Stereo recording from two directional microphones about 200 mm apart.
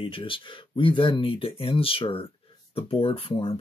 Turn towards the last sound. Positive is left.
turn(degrees=25)  # may be behind; listen again after turning